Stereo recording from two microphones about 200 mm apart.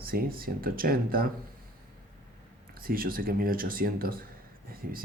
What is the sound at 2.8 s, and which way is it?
Speech, 45° right (ahead or behind).